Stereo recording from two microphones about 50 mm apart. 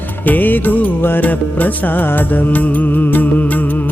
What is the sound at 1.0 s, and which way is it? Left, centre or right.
Music, left.